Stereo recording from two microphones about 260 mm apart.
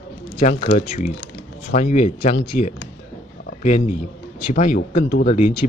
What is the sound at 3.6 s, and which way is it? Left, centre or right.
Speech, left.